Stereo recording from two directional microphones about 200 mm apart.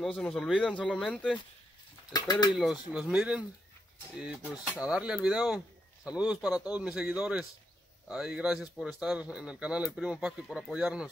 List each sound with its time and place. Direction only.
0.0 s speech: centre (ahead or behind)
2.1 s speech: 20° left (ahead or behind)
2.5 s speech: 5° right (ahead or behind)